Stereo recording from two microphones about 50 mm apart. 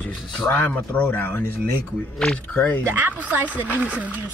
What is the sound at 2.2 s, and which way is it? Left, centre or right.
Speech, centre.